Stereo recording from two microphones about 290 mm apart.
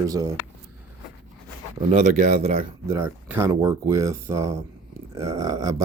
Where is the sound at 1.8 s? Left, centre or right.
Right.